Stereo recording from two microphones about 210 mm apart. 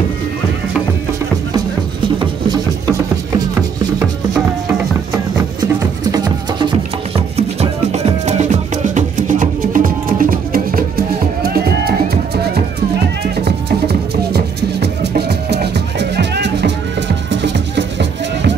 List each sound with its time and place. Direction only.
2.1 s music: 20° right (ahead or behind)
4.0 s music: 5° right (ahead or behind)
7.9 s music: 30° right (ahead or behind); by 12.2 s 45° right (ahead or behind)
13.4 s music: 50° right (ahead or behind)